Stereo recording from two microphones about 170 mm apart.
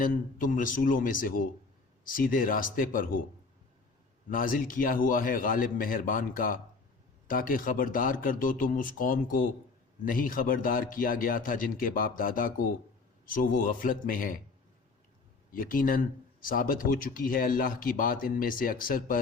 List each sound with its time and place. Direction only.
0.0 s speech: 55° left (ahead or behind)
4.3 s speech: 55° left (ahead or behind)
15.5 s speech: 55° left (ahead or behind)